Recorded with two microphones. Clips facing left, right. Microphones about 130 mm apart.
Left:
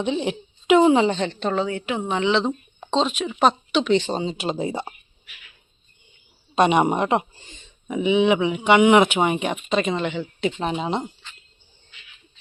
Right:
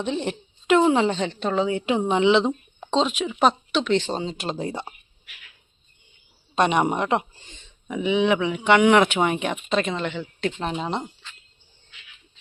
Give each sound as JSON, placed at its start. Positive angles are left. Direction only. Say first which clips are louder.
{"t": 0.0, "sound": "speech", "louder": "left 3 dB", "side_deg": 5}
{"t": 1.6, "sound": "a woman's voice", "louder": "right 3 dB", "side_deg": -25}
{"t": 2.5, "sound": "speech", "louder": "even", "side_deg": 0}
{"t": 6.6, "sound": "speech", "louder": "left 3 dB", "side_deg": 10}